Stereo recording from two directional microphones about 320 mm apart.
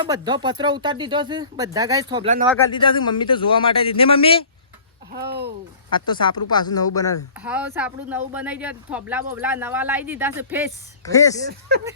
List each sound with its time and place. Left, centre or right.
0.0 s speech: centre
2.7 s a man's voice: centre
5.1 s speech: right
5.9 s a man's voice: centre
7.3 s speech: centre
11.0 s a man's voice: centre